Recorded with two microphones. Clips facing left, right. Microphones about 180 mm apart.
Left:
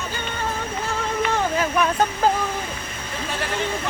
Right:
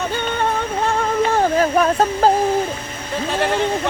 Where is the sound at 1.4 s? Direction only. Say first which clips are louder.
Right 6 dB; 45° right (ahead or behind).